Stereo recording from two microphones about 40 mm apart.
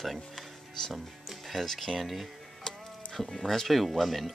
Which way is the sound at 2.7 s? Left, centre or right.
Centre.